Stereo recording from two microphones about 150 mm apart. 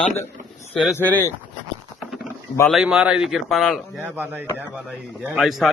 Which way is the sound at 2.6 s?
Centre (ahead or behind).